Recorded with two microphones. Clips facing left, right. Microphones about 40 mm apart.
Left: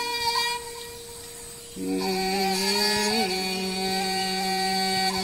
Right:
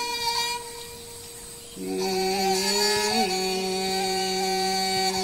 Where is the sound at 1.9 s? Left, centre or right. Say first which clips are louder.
Right 1 dB; centre.